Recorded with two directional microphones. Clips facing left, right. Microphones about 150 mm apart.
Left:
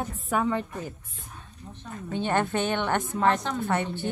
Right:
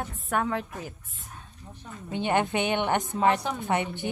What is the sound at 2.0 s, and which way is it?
A woman's voice, 15° right (ahead or behind).